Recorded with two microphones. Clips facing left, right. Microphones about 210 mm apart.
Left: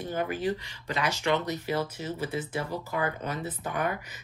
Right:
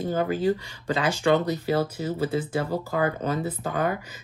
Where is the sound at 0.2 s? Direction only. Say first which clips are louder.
Right 5 dB; 30° right (ahead or behind).